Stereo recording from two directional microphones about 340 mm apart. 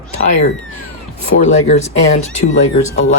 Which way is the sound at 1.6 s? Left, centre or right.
Centre.